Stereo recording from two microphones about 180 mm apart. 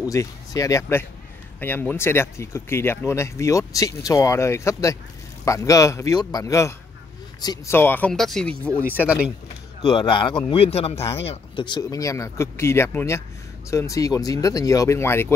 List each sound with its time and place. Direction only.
0.0 s speech: 20° left (ahead or behind)
8.9 s speech: 5° right (ahead or behind)
9.8 s speech: 25° left (ahead or behind)